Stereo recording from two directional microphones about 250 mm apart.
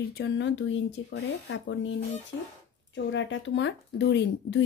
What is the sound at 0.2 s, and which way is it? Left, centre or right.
Speech, left.